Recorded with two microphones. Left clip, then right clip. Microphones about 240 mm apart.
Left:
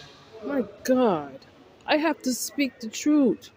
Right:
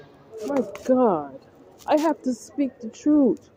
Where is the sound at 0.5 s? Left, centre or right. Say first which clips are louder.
Right 2 dB; left.